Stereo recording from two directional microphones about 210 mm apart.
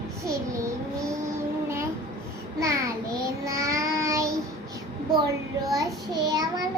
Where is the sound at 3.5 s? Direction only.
15° right (ahead or behind).